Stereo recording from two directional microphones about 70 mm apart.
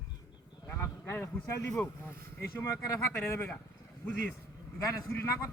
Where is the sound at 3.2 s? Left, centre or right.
Left.